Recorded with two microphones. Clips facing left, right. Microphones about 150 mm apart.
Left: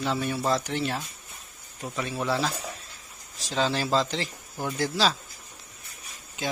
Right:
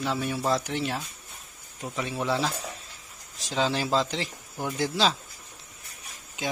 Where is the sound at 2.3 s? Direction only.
10° right (ahead or behind).